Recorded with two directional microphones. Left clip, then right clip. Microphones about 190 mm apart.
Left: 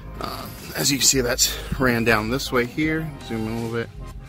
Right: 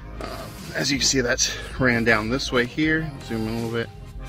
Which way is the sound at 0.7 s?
15° left (ahead or behind).